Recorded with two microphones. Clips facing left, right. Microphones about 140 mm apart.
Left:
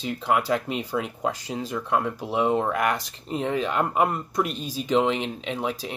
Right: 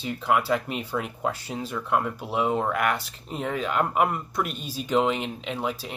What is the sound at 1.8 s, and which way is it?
Speech, 20° left (ahead or behind).